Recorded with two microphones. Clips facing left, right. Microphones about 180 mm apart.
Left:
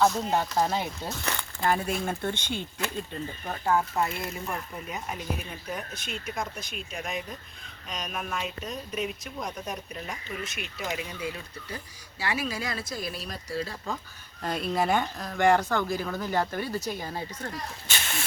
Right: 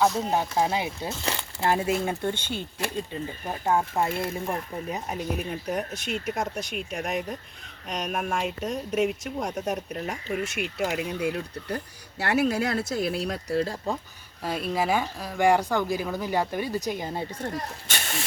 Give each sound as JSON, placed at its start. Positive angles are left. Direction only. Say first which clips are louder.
{"t": 0.0, "sound": "speech", "louder": "right 1 dB", "side_deg": -5}
{"t": 1.2, "sound": "speech", "louder": "right 1 dB", "side_deg": -25}
{"t": 3.7, "sound": "speech", "louder": "right 2 dB", "side_deg": -25}
{"t": 5.4, "sound": "speech", "louder": "right 7 dB", "side_deg": -70}
{"t": 8.6, "sound": "speech", "louder": "right 7 dB", "side_deg": -80}
{"t": 14.4, "sound": "speech", "louder": "right 1 dB", "side_deg": -5}
{"t": 17.5, "sound": "speech", "louder": "right 3 dB", "side_deg": -40}